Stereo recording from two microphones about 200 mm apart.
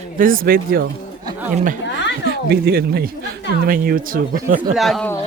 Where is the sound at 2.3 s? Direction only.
50° right (ahead or behind).